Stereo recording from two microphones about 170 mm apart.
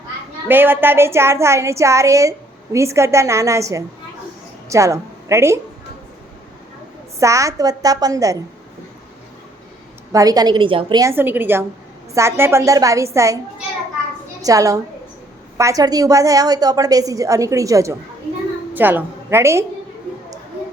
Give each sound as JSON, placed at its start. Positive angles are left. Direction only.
{"t": 0.4, "sound": "a woman's voice", "side_deg": -10}
{"t": 7.2, "sound": "a woman's voice", "side_deg": -20}
{"t": 10.1, "sound": "a woman's voice", "side_deg": -20}
{"t": 11.0, "sound": "a woman's voice", "side_deg": -10}
{"t": 14.4, "sound": "a woman's voice", "side_deg": -20}